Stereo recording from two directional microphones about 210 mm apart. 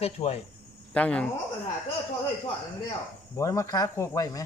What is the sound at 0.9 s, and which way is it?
Speech, 5° left (ahead or behind).